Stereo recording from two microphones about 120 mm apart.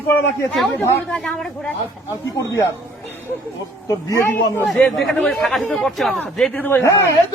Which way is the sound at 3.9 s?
25° left (ahead or behind).